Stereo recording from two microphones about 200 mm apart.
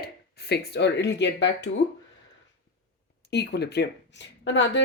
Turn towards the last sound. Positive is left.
turn(degrees=65)  # may be behind; listen again after turning